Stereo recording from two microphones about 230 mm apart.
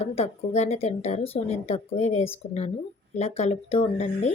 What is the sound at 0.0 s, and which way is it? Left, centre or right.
A woman's voice, left.